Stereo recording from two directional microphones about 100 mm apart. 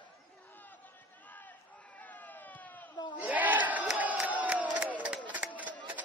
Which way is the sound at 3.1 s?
15° right (ahead or behind).